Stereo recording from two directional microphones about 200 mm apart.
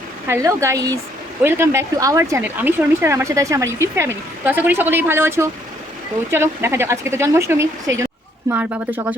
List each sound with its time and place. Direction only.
0.3 s speech: 15° right (ahead or behind)